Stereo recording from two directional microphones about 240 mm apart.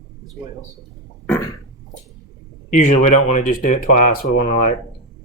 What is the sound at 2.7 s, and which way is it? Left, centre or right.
Speech, left.